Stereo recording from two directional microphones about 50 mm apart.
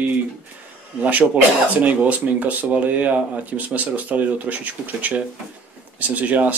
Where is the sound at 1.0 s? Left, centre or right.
Right.